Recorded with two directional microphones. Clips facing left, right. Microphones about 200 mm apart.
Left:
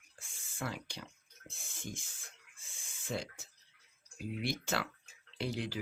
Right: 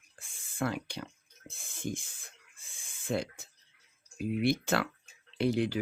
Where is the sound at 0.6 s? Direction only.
60° right (ahead or behind).